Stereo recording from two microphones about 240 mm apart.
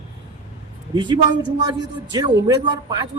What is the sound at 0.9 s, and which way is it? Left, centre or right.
A woman's voice, centre.